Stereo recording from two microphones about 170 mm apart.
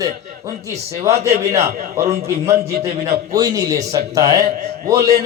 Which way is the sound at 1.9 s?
15° right (ahead or behind).